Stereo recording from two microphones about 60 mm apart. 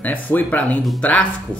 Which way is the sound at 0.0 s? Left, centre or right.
Left.